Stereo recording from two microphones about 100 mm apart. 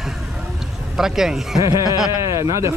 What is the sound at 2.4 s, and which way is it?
Speech, 30° right (ahead or behind).